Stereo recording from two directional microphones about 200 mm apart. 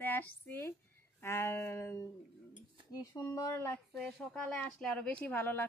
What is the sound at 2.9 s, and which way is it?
Speech, 15° left (ahead or behind).